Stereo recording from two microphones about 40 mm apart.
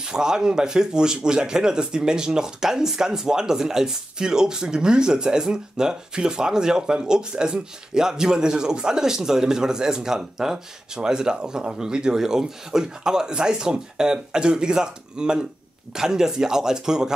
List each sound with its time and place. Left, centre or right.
0.0 s speech: centre